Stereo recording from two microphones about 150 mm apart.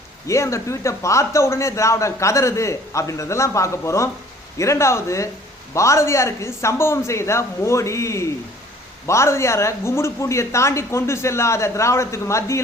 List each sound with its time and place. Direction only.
0.3 s speech: 20° left (ahead or behind)